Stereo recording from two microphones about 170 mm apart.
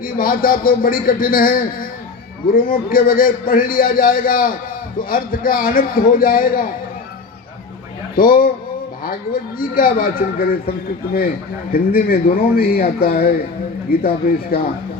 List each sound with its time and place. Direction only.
0.0 s speech: 55° left (ahead or behind)
8.1 s speech: 55° left (ahead or behind)